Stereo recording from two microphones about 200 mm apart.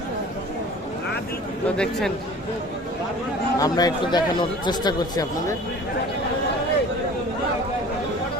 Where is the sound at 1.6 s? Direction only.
5° left (ahead or behind).